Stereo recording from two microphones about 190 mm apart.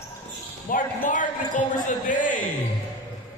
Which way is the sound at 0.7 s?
45° left (ahead or behind).